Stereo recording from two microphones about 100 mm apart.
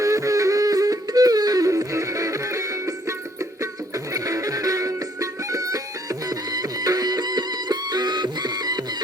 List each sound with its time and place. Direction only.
0.0 s music: 30° right (ahead or behind)